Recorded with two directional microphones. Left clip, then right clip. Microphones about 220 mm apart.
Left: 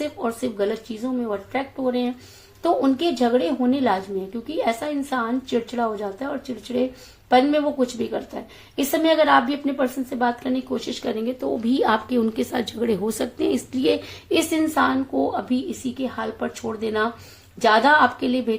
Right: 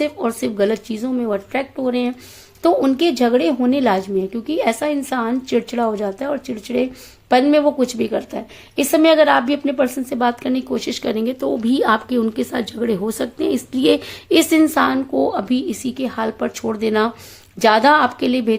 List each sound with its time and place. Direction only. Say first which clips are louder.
0.0 s a woman's voice: right 5 dB; 45° right (ahead or behind)